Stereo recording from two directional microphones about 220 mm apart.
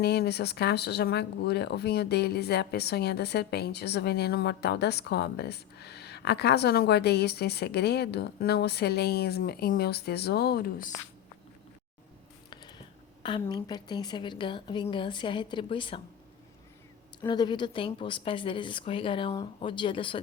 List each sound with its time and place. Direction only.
0.0 s speech: 50° left (ahead or behind)
13.2 s a woman's voice: 20° left (ahead or behind)
17.2 s a woman's voice: 20° left (ahead or behind)